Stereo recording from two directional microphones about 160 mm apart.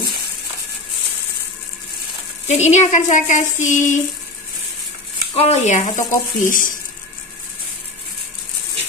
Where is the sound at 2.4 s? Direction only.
45° left (ahead or behind).